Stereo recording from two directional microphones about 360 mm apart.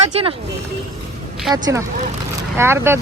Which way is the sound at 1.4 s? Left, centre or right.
Centre.